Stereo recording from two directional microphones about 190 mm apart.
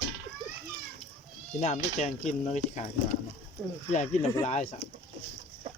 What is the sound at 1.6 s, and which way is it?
Speech, 35° left (ahead or behind).